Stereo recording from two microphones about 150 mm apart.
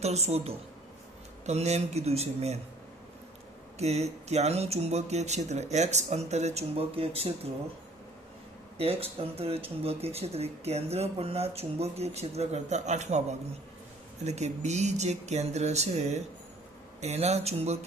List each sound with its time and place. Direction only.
0.0 s speech: 45° right (ahead or behind)
3.8 s speech: 45° right (ahead or behind)
8.8 s speech: 40° right (ahead or behind)